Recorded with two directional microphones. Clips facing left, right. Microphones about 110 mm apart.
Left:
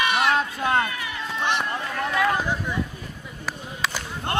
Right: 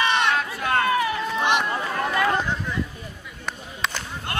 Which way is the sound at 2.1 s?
Centre (ahead or behind).